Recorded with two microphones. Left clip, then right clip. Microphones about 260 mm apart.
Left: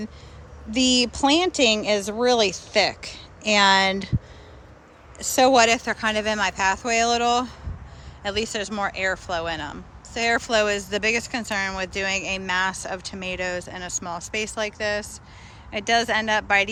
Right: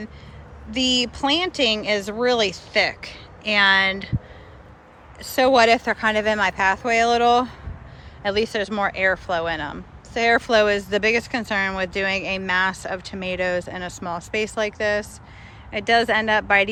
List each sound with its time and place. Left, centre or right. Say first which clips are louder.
0.7 s speech: even; left
5.2 s speech: right 1 dB; centre